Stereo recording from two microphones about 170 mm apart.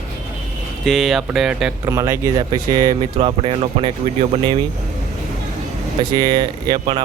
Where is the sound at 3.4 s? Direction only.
35° right (ahead or behind).